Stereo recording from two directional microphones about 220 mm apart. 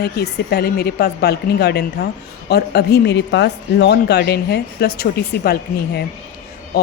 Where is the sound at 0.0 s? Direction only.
45° left (ahead or behind).